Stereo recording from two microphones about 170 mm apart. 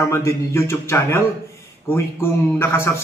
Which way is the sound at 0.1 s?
15° left (ahead or behind).